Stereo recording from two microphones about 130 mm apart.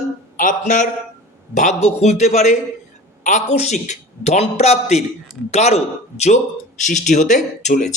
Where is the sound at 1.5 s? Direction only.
60° left (ahead or behind).